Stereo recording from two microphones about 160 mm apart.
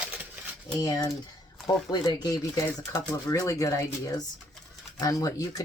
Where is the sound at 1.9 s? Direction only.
25° left (ahead or behind).